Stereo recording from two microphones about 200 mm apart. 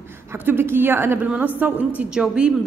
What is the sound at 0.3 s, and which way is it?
A woman's voice, 10° right (ahead or behind).